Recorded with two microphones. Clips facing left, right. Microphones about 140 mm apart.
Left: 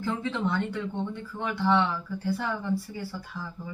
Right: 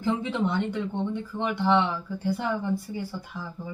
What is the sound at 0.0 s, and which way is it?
Speech, 20° right (ahead or behind).